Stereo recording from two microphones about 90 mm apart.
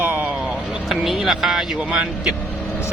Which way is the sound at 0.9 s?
Centre (ahead or behind).